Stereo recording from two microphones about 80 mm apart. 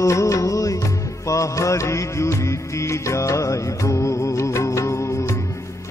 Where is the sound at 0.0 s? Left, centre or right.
Left.